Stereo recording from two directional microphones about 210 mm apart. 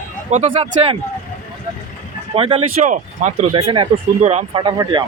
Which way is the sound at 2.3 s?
30° right (ahead or behind).